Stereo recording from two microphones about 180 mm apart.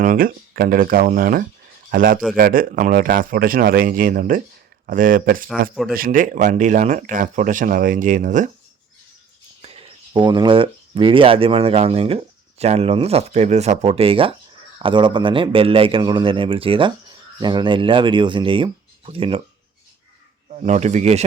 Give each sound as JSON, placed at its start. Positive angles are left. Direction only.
{"t": 0.0, "sound": "speech", "side_deg": -50}
{"t": 9.6, "sound": "speech", "side_deg": -30}
{"t": 20.5, "sound": "a man's voice", "side_deg": -40}